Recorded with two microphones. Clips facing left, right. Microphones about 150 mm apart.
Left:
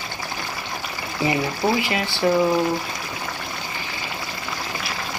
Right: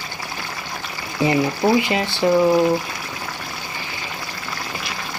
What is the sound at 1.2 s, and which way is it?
Speech, 20° right (ahead or behind).